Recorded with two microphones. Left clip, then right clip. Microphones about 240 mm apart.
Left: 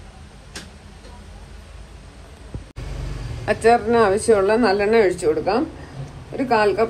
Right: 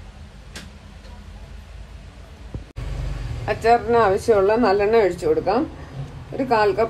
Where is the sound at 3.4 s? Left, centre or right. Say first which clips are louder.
Left 1 dB; left.